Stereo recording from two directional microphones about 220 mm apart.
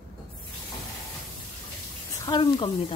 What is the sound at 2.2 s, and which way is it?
Speech, 20° left (ahead or behind).